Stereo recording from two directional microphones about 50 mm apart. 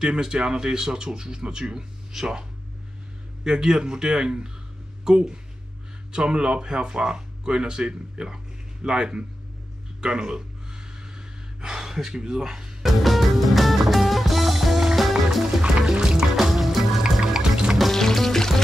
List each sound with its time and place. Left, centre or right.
0.0 s speech: centre
3.4 s speech: centre
9.9 s gasp: centre
12.8 s music: centre
15.6 s music: centre
16.3 s music: centre
17.0 s music: centre
17.7 s music: centre